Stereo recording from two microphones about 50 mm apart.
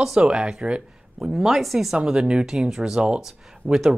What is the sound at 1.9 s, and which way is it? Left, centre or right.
Speech, centre.